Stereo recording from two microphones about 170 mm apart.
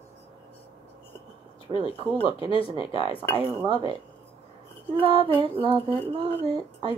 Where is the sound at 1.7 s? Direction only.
30° left (ahead or behind).